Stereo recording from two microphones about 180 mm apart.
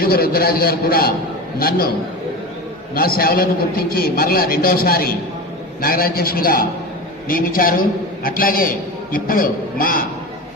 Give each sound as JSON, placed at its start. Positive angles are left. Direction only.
{"t": 0.0, "sound": "a man's voice", "side_deg": 55}
{"t": 2.9, "sound": "a man's voice", "side_deg": 55}